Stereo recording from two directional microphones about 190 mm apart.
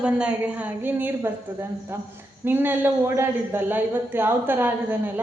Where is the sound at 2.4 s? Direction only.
10° right (ahead or behind).